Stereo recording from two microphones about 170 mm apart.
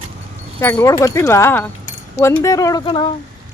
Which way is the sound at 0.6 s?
15° left (ahead or behind).